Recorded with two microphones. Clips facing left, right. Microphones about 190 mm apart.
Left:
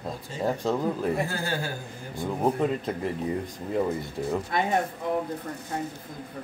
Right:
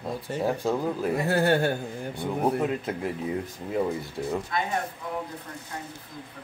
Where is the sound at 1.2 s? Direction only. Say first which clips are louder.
Right 8 dB; 65° right (ahead or behind).